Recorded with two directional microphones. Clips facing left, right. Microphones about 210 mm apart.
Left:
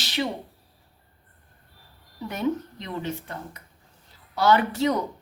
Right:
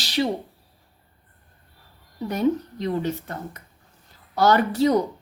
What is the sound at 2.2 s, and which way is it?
A woman's voice, 40° right (ahead or behind).